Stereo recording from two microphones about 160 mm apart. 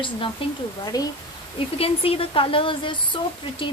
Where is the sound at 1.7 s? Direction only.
35° left (ahead or behind).